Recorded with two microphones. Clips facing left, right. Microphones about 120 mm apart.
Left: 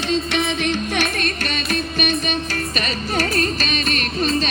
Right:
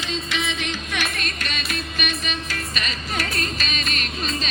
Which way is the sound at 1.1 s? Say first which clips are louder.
Left 6 dB; 35° left (ahead or behind).